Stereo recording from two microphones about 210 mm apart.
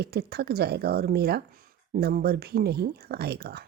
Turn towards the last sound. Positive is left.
turn(degrees=-50)  # may be behind; listen again after turning